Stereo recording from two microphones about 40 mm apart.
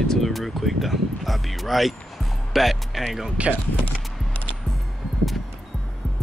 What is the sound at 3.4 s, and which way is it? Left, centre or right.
Speech, right.